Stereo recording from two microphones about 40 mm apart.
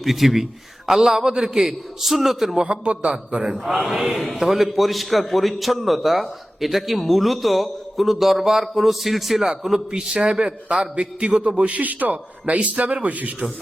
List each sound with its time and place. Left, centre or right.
0.0 s a man's voice: centre
2.6 s a man's voice: right
3.4 s a man's voice: centre; by 11.6 s right
11.6 s a man's voice: right